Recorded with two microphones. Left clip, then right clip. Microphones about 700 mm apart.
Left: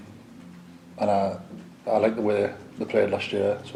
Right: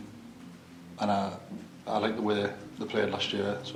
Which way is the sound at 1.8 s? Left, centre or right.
Centre.